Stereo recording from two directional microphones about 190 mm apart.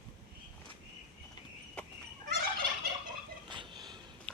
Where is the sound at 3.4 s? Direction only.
25° right (ahead or behind).